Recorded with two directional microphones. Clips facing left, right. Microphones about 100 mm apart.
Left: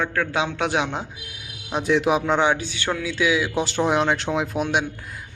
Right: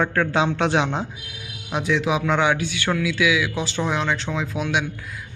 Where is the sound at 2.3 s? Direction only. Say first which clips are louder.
Even; 30° left (ahead or behind).